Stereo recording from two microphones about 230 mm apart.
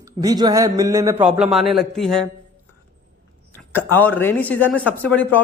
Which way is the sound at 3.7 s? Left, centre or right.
Centre.